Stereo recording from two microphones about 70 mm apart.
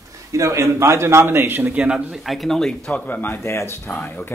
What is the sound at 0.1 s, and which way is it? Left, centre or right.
A man's voice, right.